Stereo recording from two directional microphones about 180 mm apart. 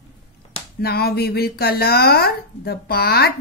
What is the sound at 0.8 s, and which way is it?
Speech, 60° left (ahead or behind).